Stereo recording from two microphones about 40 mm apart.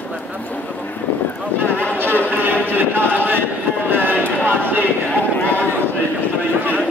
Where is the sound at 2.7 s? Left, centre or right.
Right.